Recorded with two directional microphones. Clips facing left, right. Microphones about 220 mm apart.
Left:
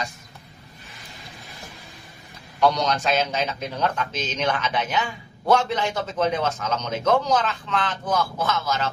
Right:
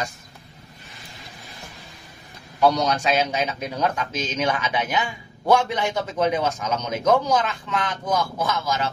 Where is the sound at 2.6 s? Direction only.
10° right (ahead or behind).